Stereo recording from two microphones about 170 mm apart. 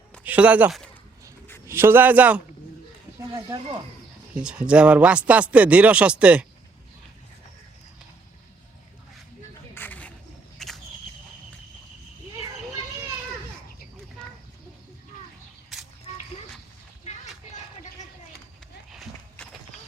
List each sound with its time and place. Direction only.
0.2 s a man's voice: 10° right (ahead or behind)
3.3 s speech: 30° right (ahead or behind)
4.4 s a man's voice: 5° right (ahead or behind)
9.7 s a sound: 10° left (ahead or behind)
10.6 s whip: centre (ahead or behind)
17.0 s a sound: 40° left (ahead or behind)